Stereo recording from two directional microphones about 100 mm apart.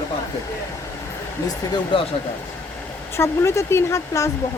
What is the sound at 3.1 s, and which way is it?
Speech, 30° left (ahead or behind).